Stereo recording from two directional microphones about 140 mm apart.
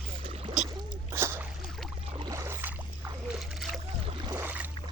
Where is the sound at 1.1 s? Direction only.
15° right (ahead or behind).